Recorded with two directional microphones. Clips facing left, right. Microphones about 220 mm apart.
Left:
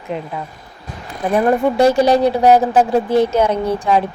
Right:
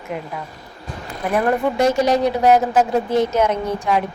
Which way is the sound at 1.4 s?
30° left (ahead or behind).